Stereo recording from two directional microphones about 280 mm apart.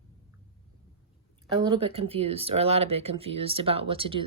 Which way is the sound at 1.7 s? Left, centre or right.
Centre.